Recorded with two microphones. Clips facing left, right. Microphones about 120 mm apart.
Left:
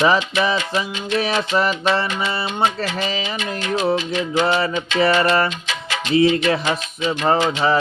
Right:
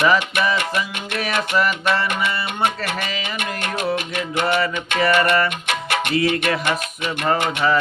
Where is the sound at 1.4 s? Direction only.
30° left (ahead or behind).